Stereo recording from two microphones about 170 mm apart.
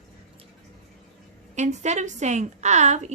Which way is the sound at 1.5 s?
45° right (ahead or behind).